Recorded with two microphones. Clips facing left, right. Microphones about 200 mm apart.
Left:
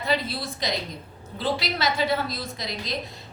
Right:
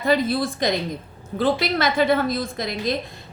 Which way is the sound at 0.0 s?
50° right (ahead or behind).